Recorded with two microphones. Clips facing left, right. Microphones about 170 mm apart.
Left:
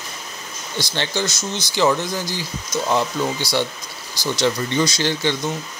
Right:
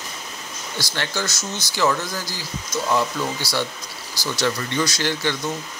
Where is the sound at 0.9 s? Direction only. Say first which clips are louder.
Left 3 dB; 25° left (ahead or behind).